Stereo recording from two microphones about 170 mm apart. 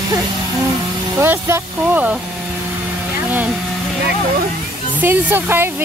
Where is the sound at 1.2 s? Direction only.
15° right (ahead or behind).